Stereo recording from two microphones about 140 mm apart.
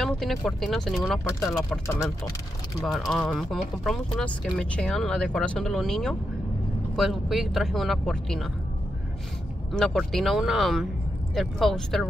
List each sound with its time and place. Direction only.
0.0 s speech: centre (ahead or behind)
3.1 s speech: 5° left (ahead or behind)
9.7 s speech: 5° left (ahead or behind)